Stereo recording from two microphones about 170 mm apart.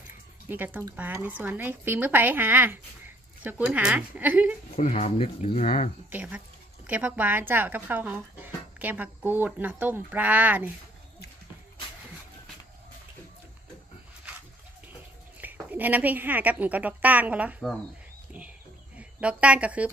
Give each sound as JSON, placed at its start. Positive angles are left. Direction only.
{"t": 0.5, "sound": "speech", "side_deg": -10}
{"t": 4.8, "sound": "speech", "side_deg": 40}
{"t": 6.1, "sound": "speech", "side_deg": -10}
{"t": 15.4, "sound": "speech", "side_deg": -10}
{"t": 18.9, "sound": "a woman's voice", "side_deg": -5}